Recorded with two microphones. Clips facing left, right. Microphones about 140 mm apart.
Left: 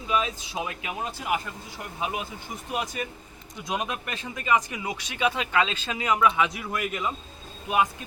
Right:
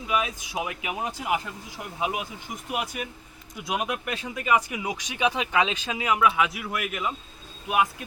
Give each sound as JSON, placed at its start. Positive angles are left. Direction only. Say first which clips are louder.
{"t": 0.1, "sound": "speech", "louder": "even", "side_deg": -10}